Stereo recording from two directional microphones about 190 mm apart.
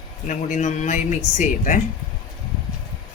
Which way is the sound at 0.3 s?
40° left (ahead or behind).